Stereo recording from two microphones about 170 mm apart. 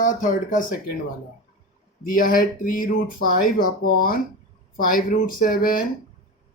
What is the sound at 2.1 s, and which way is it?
Speech, 55° left (ahead or behind).